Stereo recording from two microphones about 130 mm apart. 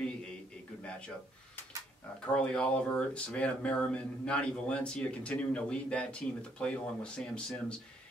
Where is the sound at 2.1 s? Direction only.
5° left (ahead or behind).